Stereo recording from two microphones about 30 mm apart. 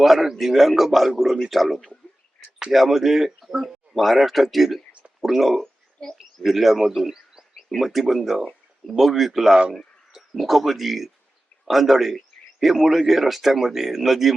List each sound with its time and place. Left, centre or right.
0.0 s speech: centre
3.9 s speech: centre
7.1 s a sound: centre
7.8 s speech: centre